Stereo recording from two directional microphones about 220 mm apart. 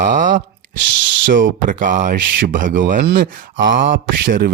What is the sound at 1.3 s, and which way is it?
Speech, 35° right (ahead or behind).